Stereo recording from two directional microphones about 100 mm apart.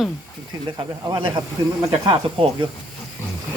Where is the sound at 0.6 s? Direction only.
45° right (ahead or behind).